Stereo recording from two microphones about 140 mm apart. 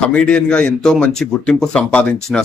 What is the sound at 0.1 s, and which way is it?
A man's voice, 5° left (ahead or behind).